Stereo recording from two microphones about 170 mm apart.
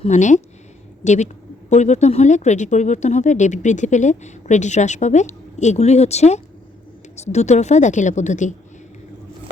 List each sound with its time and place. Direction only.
0.0 s speech: 45° left (ahead or behind)